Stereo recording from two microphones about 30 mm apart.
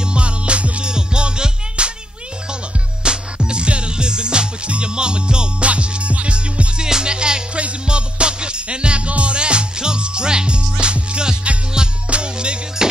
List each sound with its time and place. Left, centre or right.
0.0 s music: right
0.9 s music: right
3.0 s music: right
5.7 s music: right
6.8 s music: right